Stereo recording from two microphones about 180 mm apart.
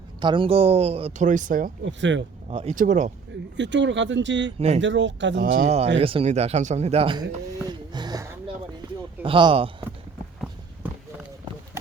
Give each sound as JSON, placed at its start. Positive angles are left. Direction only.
{"t": 0.2, "sound": "speech", "side_deg": -25}
{"t": 1.3, "sound": "speech", "side_deg": -45}
{"t": 1.8, "sound": "speech", "side_deg": -90}
{"t": 2.5, "sound": "speech", "side_deg": -30}
{"t": 2.7, "sound": "speech", "side_deg": -45}
{"t": 3.6, "sound": "speech", "side_deg": -80}
{"t": 5.5, "sound": "speech", "side_deg": -35}
{"t": 9.2, "sound": "speech", "side_deg": -30}